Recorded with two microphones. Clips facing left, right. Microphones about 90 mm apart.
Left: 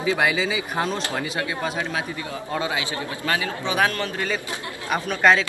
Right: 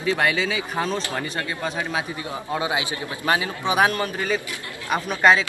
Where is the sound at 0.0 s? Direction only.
5° left (ahead or behind).